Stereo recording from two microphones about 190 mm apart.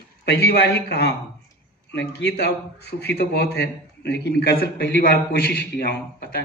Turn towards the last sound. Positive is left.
turn(degrees=50)  # may be behind; listen again after turning